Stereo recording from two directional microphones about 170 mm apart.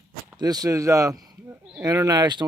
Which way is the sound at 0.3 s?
20° right (ahead or behind).